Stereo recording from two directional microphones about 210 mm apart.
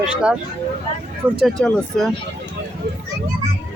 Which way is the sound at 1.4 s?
5° left (ahead or behind).